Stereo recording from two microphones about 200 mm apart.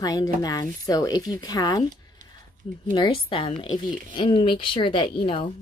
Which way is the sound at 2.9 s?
25° left (ahead or behind).